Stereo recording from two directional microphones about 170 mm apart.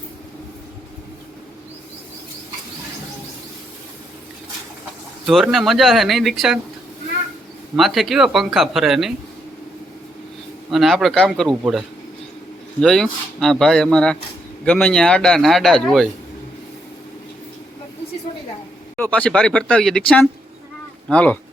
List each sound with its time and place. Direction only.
5.2 s a man's voice: centre (ahead or behind)
7.8 s a man's voice: centre (ahead or behind)
10.7 s a man's voice: centre (ahead or behind)
12.8 s a man's voice: centre (ahead or behind)
18.9 s speech: 10° left (ahead or behind)